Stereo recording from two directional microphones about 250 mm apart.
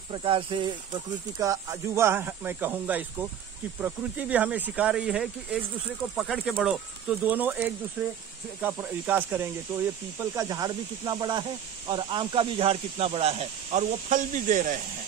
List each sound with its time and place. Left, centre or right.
0.1 s speech: right